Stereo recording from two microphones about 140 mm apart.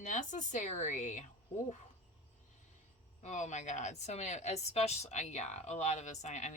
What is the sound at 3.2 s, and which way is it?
A woman's voice, 60° left (ahead or behind).